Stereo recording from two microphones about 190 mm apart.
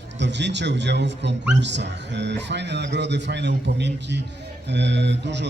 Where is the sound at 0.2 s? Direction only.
65° right (ahead or behind).